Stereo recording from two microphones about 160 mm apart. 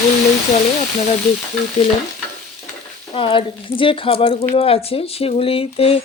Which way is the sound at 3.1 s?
35° left (ahead or behind).